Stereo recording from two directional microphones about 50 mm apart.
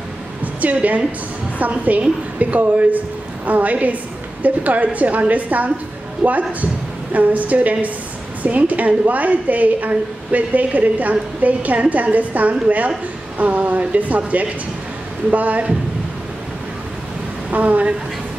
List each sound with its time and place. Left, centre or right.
0.4 s a sound: right
1.6 s a woman's voice: right
17.5 s speech: right